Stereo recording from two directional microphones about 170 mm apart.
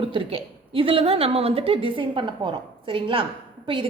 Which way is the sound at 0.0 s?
30° right (ahead or behind).